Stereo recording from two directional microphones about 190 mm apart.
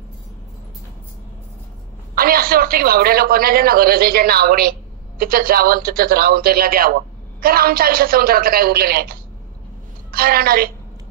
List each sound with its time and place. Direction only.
2.1 s a man's voice: 50° right (ahead or behind)